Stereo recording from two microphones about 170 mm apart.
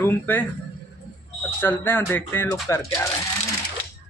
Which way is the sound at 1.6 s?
15° left (ahead or behind).